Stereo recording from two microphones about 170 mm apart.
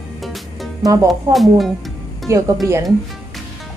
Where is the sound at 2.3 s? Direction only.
20° right (ahead or behind).